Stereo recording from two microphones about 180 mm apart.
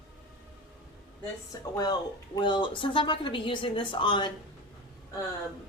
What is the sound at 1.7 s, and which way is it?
Speech, 20° left (ahead or behind).